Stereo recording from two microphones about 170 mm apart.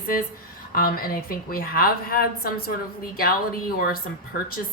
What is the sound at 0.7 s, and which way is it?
Speech, 60° left (ahead or behind).